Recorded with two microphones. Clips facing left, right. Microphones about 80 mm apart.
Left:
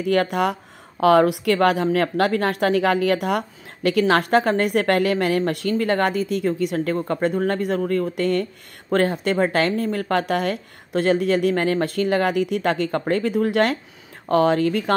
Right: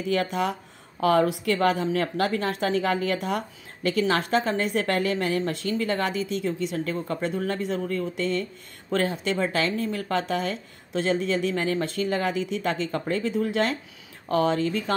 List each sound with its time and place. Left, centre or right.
0.0 s speech: left